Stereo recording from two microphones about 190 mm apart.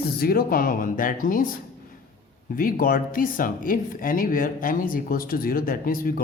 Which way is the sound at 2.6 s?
45° left (ahead or behind).